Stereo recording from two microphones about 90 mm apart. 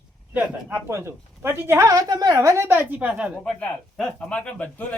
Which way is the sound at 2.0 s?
45° right (ahead or behind).